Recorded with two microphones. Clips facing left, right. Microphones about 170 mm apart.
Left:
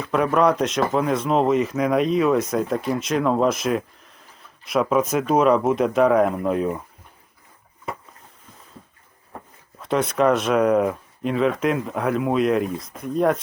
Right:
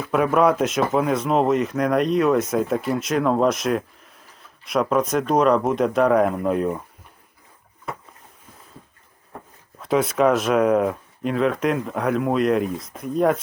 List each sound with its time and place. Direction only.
0.0 s speech: 5° right (ahead or behind)
9.7 s speech: centre (ahead or behind)